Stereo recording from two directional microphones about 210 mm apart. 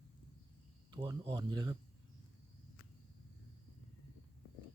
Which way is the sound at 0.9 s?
15° right (ahead or behind).